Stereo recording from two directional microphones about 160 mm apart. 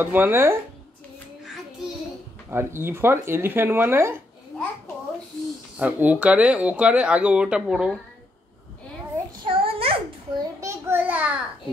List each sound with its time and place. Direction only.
0.0 s speech: 10° right (ahead or behind)
2.5 s speech: 15° right (ahead or behind)
5.8 s speech: 10° right (ahead or behind)
9.4 s a sound: 35° right (ahead or behind)
10.6 s a child's voice: 15° right (ahead or behind)